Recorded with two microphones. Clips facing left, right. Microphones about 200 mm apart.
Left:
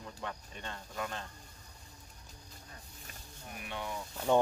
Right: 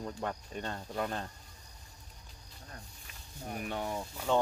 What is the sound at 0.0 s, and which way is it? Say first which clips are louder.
Speech: right 6 dB; 45° right (ahead or behind).